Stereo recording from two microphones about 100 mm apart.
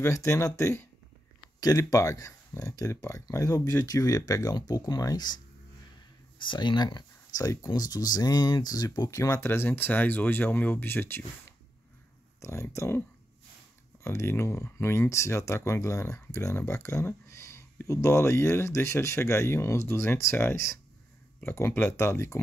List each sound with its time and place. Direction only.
0.0 s speech: 30° left (ahead or behind)
6.4 s speech: 50° left (ahead or behind); by 11.2 s 20° left (ahead or behind)
12.4 s speech: 30° left (ahead or behind)
14.0 s speech: 25° left (ahead or behind)